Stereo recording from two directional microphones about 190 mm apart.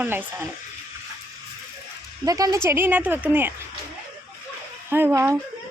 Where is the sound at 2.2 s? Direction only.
20° right (ahead or behind).